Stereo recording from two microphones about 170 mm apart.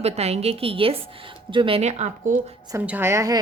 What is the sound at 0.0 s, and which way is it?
A woman's voice, 40° right (ahead or behind).